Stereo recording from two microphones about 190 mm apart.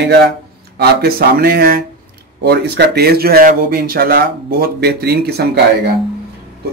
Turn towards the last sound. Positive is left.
turn(degrees=-55)  # may be behind; listen again after turning